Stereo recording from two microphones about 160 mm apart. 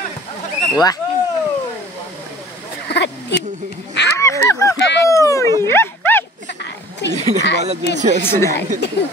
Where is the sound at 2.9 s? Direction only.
90° left.